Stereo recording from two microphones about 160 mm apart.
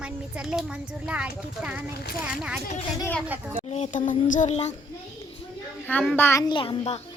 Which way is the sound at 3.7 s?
45° left (ahead or behind).